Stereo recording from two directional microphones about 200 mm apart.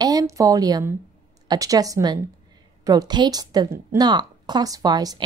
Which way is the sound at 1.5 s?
20° right (ahead or behind).